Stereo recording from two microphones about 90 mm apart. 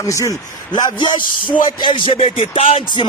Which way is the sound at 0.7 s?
55° left (ahead or behind).